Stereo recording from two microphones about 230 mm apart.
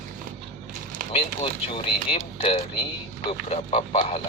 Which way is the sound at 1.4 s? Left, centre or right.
Left.